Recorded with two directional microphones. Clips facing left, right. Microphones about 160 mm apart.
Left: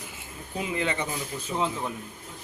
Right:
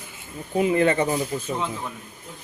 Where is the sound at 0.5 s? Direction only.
50° right (ahead or behind).